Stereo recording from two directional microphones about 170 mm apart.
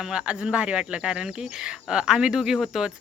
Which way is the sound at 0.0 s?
5° right (ahead or behind).